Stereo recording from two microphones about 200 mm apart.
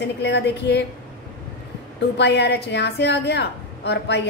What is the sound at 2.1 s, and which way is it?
A woman's voice, 60° left (ahead or behind).